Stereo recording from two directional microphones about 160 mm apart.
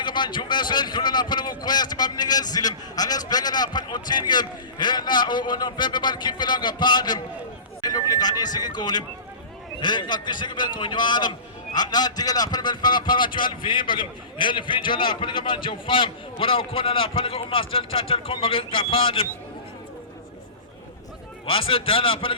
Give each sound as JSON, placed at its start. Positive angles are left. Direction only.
{"t": 0.0, "sound": "a man's voice", "side_deg": 30}
{"t": 21.4, "sound": "a man's voice", "side_deg": 35}